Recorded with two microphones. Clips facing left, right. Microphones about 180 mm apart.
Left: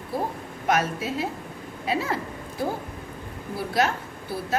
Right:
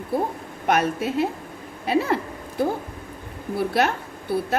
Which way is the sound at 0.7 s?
60° right (ahead or behind).